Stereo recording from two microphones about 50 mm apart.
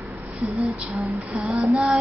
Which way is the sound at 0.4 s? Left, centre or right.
Right.